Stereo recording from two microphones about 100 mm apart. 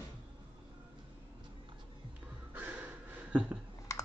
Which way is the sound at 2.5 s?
20° right (ahead or behind).